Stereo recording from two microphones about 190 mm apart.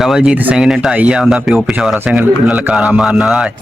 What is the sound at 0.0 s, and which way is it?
A man's voice, 5° right (ahead or behind).